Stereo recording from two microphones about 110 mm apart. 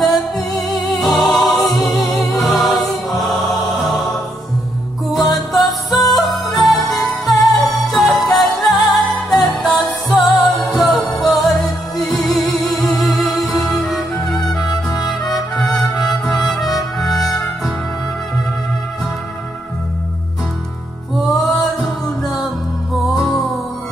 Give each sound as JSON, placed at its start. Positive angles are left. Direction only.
{"t": 0.0, "sound": "music", "side_deg": 5}
{"t": 5.7, "sound": "music", "side_deg": 0}
{"t": 14.5, "sound": "music", "side_deg": 40}
{"t": 15.0, "sound": "music", "side_deg": 0}
{"t": 21.3, "sound": "music", "side_deg": 0}